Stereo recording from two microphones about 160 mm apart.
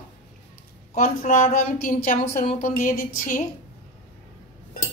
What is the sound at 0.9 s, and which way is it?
A woman's voice, 55° left (ahead or behind).